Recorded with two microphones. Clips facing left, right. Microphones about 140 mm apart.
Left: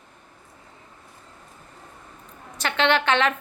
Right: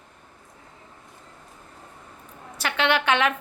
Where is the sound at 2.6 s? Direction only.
10° right (ahead or behind).